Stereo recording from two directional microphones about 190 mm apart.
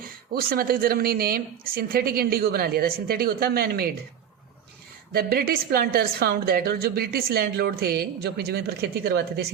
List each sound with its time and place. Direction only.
0.0 s speech: 50° right (ahead or behind)
5.1 s a woman's voice: 55° right (ahead or behind)